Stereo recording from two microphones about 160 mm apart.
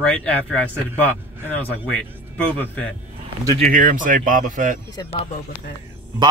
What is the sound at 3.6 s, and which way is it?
Speech, 55° right (ahead or behind).